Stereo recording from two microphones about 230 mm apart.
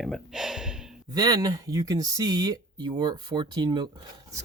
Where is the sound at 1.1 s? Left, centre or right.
Centre.